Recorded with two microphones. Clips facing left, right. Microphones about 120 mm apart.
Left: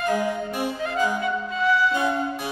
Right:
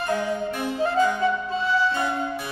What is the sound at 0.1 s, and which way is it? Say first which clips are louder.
Music: left 1 dB; 15° left (ahead or behind).